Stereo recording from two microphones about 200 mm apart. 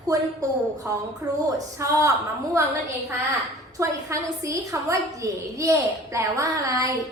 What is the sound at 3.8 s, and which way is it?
A woman's voice, 15° right (ahead or behind).